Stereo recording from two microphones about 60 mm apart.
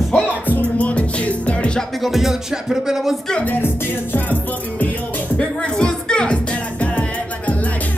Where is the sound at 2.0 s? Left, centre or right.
Centre.